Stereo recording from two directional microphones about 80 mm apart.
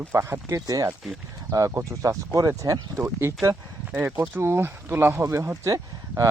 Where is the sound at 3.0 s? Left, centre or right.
Right.